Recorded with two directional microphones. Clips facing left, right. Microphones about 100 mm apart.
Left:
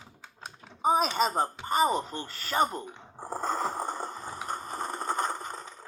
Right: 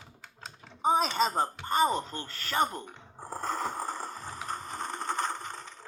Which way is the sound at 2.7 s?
30° left (ahead or behind).